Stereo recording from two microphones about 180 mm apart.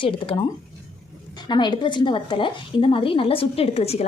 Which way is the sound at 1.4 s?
25° left (ahead or behind).